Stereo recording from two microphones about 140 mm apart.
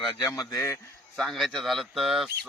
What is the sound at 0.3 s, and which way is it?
Speech, 20° left (ahead or behind).